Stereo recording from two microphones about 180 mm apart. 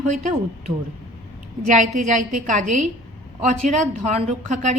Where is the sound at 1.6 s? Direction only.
45° right (ahead or behind).